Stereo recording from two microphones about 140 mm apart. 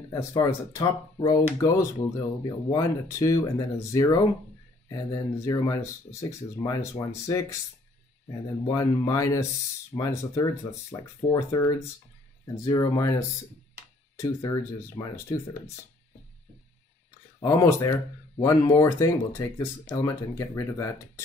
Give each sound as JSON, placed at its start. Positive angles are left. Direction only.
{"t": 0.1, "sound": "speech", "side_deg": 25}
{"t": 8.6, "sound": "speech", "side_deg": 25}
{"t": 12.6, "sound": "speech", "side_deg": 25}
{"t": 14.2, "sound": "speech", "side_deg": 25}
{"t": 17.6, "sound": "speech", "side_deg": 20}